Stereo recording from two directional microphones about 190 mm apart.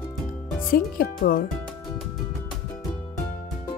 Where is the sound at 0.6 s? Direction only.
45° left (ahead or behind).